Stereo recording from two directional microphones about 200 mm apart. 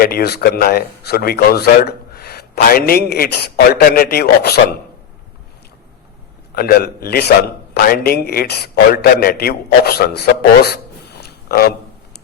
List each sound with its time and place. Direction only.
0.0 s speech: 50° left (ahead or behind)
6.5 s speech: 50° left (ahead or behind)
11.2 s a sound: 50° left (ahead or behind)